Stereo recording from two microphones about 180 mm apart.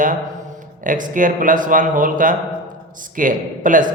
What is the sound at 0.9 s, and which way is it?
Speech, 45° right (ahead or behind).